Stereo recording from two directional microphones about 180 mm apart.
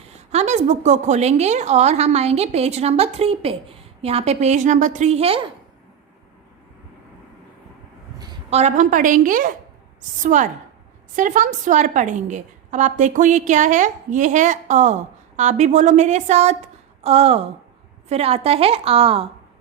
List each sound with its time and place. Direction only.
0.3 s a woman's voice: 40° right (ahead or behind)
8.4 s a woman's voice: 40° right (ahead or behind)